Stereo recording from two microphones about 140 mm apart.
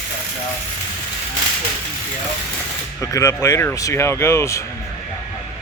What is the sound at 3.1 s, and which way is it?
Speech, 20° left (ahead or behind).